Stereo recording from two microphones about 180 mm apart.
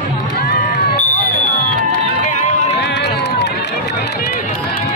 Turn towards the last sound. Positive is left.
turn(degrees=70)  # may be behind; listen again after turning